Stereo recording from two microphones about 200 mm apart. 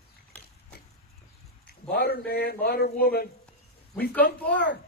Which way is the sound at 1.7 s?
55° left (ahead or behind).